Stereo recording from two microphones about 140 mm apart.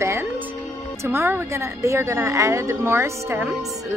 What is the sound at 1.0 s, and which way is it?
A woman's voice, 15° right (ahead or behind).